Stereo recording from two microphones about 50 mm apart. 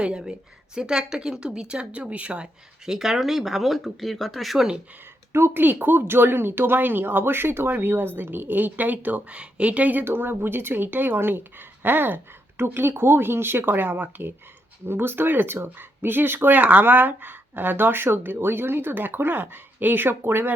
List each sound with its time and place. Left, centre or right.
0.0 s a woman's voice: centre
4.5 s a woman's voice: centre
5.3 s speech: right
5.6 s speech: right
10.0 s speech: right
16.6 s speech: right